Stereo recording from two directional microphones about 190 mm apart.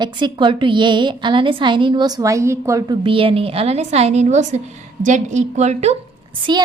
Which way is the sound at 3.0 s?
30° right (ahead or behind).